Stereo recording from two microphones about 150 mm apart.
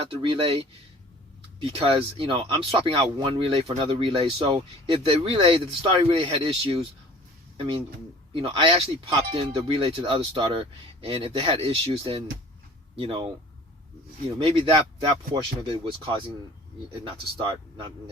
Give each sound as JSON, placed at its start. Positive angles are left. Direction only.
{"t": 0.1, "sound": "speech", "side_deg": -35}
{"t": 14.3, "sound": "speech", "side_deg": -35}
{"t": 16.9, "sound": "speech", "side_deg": -35}